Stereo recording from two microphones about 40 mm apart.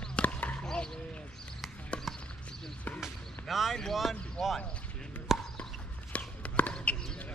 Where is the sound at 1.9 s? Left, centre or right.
Left.